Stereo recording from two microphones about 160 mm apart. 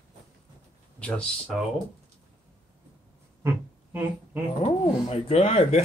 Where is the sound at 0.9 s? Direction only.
5° left (ahead or behind).